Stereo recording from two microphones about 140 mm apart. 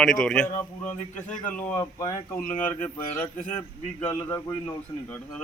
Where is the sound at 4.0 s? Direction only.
10° left (ahead or behind).